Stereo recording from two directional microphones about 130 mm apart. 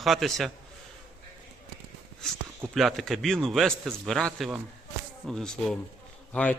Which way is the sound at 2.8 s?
Centre (ahead or behind).